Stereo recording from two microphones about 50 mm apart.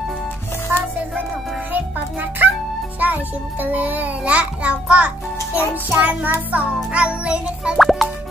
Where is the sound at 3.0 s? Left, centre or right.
Right.